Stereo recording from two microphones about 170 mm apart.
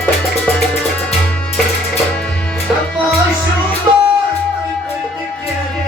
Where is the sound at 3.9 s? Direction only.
20° right (ahead or behind).